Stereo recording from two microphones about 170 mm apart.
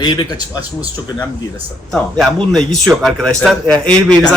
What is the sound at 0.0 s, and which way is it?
Speech, 25° left (ahead or behind).